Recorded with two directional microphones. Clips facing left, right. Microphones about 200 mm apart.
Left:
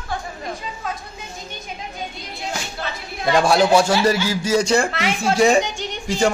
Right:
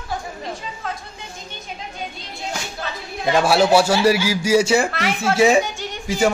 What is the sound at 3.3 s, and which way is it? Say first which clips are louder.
A man's voice: even; 5° right (ahead or behind).